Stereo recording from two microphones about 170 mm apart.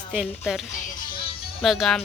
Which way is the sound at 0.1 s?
5° right (ahead or behind).